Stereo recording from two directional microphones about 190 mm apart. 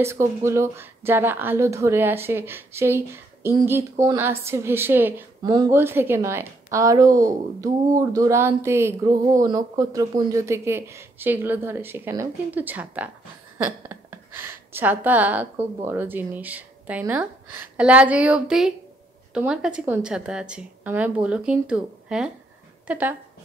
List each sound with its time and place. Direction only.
0.0 s a woman's voice: 15° right (ahead or behind)
5.4 s a woman's voice: 20° right (ahead or behind)